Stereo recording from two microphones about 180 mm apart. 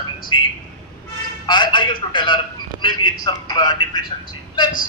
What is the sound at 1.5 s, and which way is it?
A man's voice, 25° left (ahead or behind).